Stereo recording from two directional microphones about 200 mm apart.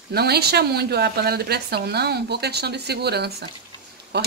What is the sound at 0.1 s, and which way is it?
A woman's voice, 55° right (ahead or behind).